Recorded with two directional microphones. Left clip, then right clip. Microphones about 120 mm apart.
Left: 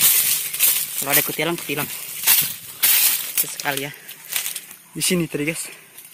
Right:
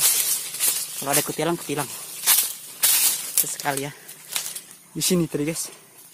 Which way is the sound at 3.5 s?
10° right (ahead or behind).